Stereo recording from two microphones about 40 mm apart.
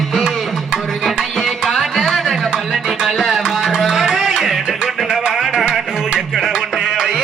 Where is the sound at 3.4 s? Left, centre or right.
Centre.